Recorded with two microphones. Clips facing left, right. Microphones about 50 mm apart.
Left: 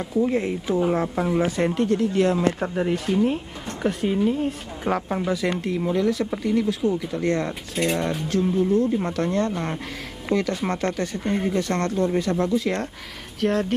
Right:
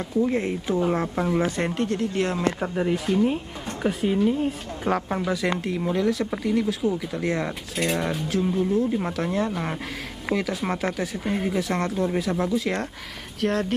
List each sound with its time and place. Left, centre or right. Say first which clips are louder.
0.2 s speech: left 1 dB; centre
1.9 s speech: left 5 dB; right
2.6 s speech: left 1 dB; centre